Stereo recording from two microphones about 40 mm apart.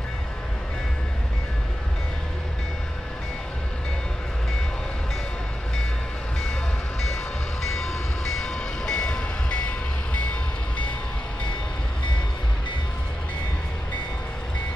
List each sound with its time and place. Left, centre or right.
7.6 s train: centre